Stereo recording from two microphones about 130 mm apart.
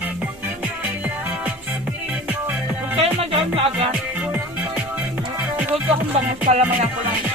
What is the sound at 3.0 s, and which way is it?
Music, 50° right (ahead or behind).